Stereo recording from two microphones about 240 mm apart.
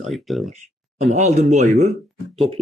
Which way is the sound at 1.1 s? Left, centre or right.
Right.